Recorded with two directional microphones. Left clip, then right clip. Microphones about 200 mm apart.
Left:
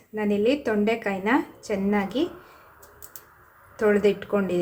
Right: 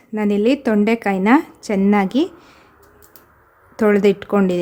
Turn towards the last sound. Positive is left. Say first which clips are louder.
# right 7 dB
turn(degrees=-45)  # may be behind; listen again after turning